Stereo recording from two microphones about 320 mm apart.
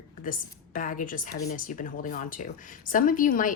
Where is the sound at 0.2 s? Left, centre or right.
Left.